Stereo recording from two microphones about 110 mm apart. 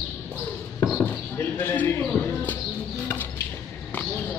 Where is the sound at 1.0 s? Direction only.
15° left (ahead or behind).